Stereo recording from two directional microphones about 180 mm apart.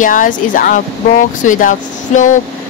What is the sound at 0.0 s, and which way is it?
Speech, 45° left (ahead or behind).